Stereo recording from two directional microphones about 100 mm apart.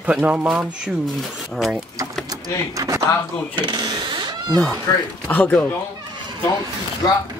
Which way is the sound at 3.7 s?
45° right (ahead or behind).